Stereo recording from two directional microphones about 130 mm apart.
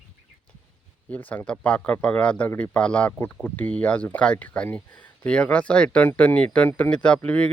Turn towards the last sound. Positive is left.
turn(degrees=10)  # may be behind; listen again after turning